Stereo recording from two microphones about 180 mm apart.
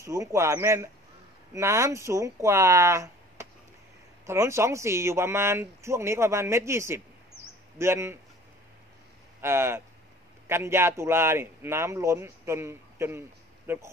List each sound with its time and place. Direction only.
0.0 s speech: 15° right (ahead or behind)
9.4 s speech: 15° right (ahead or behind)